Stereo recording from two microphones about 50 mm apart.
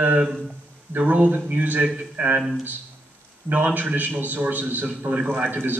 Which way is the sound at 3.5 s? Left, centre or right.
Right.